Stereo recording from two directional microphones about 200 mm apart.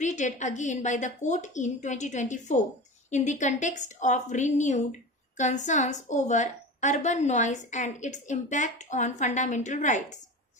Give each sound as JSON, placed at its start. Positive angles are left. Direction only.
{"t": 0.0, "sound": "a woman's voice", "side_deg": 35}